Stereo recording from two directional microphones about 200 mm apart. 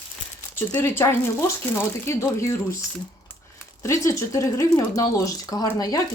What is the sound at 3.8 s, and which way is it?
Speech, 15° left (ahead or behind).